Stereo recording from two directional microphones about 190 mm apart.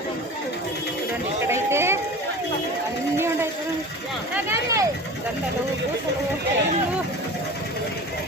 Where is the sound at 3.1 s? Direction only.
15° right (ahead or behind).